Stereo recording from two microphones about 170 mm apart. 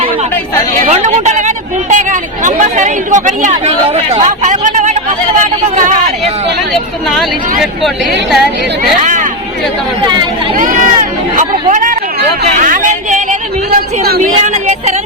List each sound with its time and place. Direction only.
0.9 s speech: 45° right (ahead or behind)
11.3 s speech: 50° right (ahead or behind)
13.7 s speech: 65° right (ahead or behind)
14.4 s music: 40° right (ahead or behind)